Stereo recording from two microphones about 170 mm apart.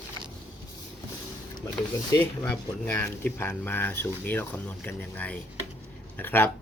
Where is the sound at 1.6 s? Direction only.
25° left (ahead or behind).